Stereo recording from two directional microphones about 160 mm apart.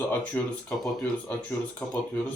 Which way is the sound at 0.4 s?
10° left (ahead or behind).